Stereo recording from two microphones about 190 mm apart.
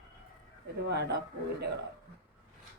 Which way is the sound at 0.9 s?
60° right (ahead or behind).